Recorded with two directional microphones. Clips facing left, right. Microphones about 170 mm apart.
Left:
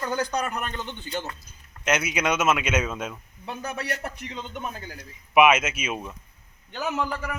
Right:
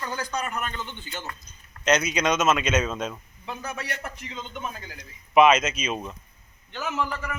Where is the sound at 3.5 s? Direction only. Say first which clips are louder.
Left 2 dB; 35° left (ahead or behind).